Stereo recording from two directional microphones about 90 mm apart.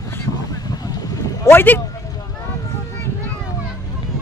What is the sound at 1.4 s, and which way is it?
Speech, 25° left (ahead or behind).